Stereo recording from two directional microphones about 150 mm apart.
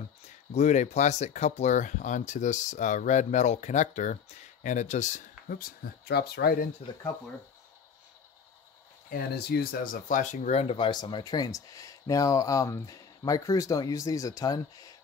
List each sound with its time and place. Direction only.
0.5 s speech: 50° left (ahead or behind); by 6.7 s 90° left
9.1 s speech: 90° left; by 14.6 s 25° left (ahead or behind)